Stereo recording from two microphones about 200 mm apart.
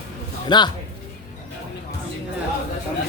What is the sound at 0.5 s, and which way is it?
Speech, 20° left (ahead or behind).